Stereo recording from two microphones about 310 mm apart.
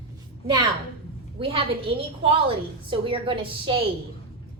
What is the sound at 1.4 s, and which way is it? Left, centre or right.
Speech, centre.